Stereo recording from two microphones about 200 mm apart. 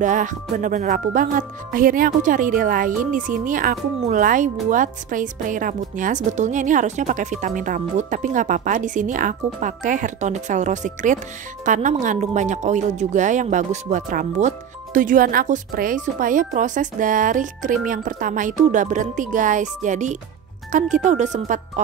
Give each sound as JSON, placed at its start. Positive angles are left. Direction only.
{"t": 0.0, "sound": "speech", "side_deg": -40}